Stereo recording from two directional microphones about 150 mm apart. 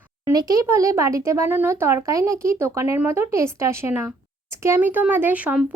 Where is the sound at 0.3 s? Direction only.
25° right (ahead or behind).